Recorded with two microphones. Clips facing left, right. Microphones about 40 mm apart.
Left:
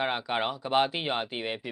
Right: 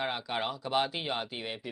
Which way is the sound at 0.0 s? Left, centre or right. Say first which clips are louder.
Left 4 dB; left.